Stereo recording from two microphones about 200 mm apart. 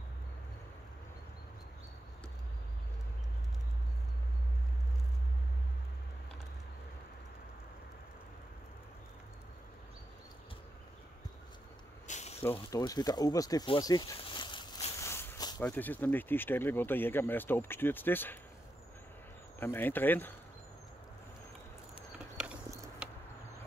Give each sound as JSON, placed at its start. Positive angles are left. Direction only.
{"t": 12.1, "sound": "snake", "side_deg": 35}
{"t": 12.5, "sound": "speech", "side_deg": 20}
{"t": 15.0, "sound": "a sound", "side_deg": 10}
{"t": 15.6, "sound": "speech", "side_deg": 10}
{"t": 19.6, "sound": "speech", "side_deg": 10}
{"t": 22.4, "sound": "a sound", "side_deg": -10}